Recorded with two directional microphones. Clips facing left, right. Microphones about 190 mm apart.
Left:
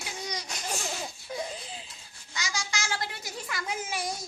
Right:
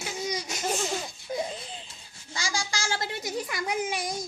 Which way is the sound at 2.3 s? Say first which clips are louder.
Right 3 dB; 30° right (ahead or behind).